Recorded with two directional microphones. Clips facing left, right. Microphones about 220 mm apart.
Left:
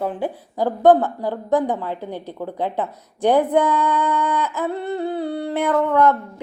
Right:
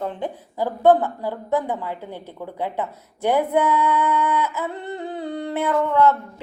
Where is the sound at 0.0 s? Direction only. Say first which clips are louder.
Left 3 dB; 10° left (ahead or behind).